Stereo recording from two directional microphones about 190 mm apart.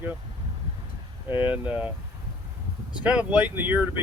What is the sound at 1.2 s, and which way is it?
Speech, 10° right (ahead or behind).